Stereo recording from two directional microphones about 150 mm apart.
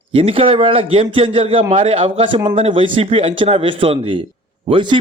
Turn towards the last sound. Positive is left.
turn(degrees=-30)  # may be behind; listen again after turning